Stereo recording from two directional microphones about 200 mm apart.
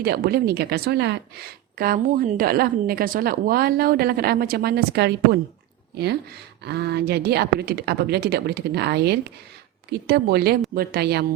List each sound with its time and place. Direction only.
0.0 s a woman's voice: 50° right (ahead or behind)
6.7 s a woman's voice: 55° right (ahead or behind)